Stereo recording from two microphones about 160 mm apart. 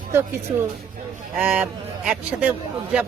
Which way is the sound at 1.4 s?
10° right (ahead or behind).